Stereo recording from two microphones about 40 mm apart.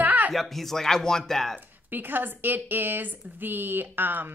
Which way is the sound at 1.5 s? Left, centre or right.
Right.